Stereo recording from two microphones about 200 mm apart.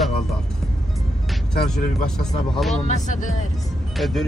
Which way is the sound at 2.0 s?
Centre (ahead or behind).